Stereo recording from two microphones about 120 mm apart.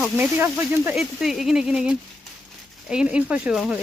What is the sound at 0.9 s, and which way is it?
Speech, centre (ahead or behind).